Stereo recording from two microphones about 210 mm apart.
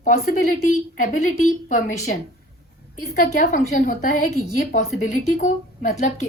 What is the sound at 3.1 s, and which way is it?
A woman's voice, 35° left (ahead or behind).